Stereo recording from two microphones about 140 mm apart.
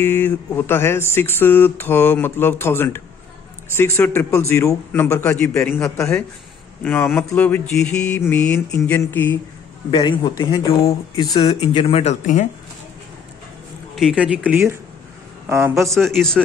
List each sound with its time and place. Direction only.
0.0 s a man's voice: 15° left (ahead or behind)
9.8 s a man's voice: 30° left (ahead or behind)
11.3 s speech: 45° left (ahead or behind)
13.9 s a man's voice: 5° right (ahead or behind)
15.7 s speech: centre (ahead or behind)